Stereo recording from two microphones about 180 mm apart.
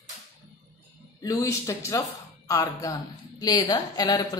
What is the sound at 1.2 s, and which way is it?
Speech, 20° left (ahead or behind).